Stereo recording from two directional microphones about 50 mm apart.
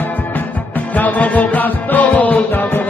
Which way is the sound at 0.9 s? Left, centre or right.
Left.